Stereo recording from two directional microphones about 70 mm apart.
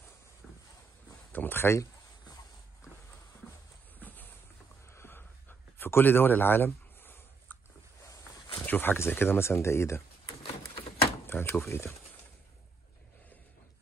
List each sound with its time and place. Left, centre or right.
1.3 s speech: left
4.9 s a sound: left
8.6 s speech: left
11.2 s drawer open or close: left
11.7 s speech: left